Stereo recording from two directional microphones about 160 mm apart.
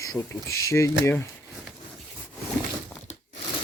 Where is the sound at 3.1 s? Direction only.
45° left (ahead or behind).